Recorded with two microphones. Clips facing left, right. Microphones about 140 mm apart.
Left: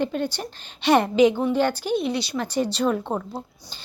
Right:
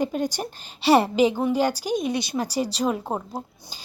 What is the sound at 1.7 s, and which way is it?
Speech, 40° right (ahead or behind).